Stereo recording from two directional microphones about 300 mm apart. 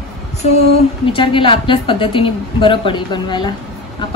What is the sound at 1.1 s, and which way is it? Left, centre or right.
A woman's voice, centre.